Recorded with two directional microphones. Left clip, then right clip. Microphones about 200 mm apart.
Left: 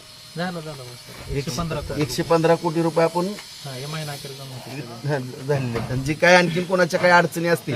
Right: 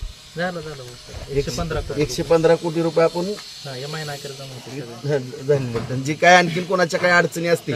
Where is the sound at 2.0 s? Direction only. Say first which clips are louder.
Right 2 dB; centre (ahead or behind).